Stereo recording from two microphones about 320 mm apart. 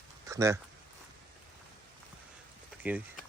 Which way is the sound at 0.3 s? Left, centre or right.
Centre.